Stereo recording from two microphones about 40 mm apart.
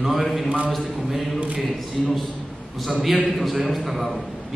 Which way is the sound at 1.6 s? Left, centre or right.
Centre.